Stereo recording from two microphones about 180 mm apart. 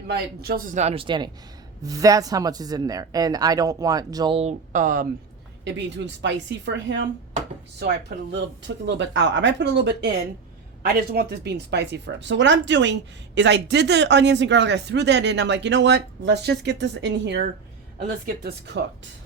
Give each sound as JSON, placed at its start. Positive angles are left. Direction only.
{"t": 0.1, "sound": "speech", "side_deg": -60}
{"t": 4.4, "sound": "speech", "side_deg": -40}
{"t": 5.6, "sound": "a woman's voice", "side_deg": -80}
{"t": 7.8, "sound": "speech", "side_deg": -70}
{"t": 10.8, "sound": "speech", "side_deg": -60}